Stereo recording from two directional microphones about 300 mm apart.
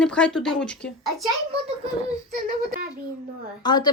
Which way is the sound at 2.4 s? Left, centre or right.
Right.